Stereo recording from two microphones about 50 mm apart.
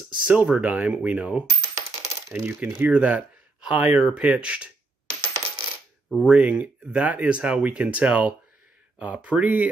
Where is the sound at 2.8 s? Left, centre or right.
Right.